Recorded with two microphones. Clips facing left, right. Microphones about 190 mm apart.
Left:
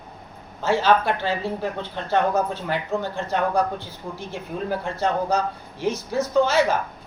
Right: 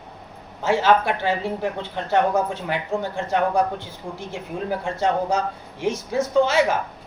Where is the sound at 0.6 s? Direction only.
20° right (ahead or behind).